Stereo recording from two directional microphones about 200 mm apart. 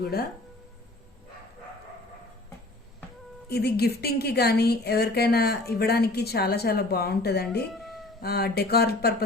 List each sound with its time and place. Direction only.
0.0 s a woman's voice: 50° left (ahead or behind)
3.5 s a woman's voice: 55° left (ahead or behind)
7.7 s a sound: centre (ahead or behind)
8.2 s a woman's voice: 50° left (ahead or behind)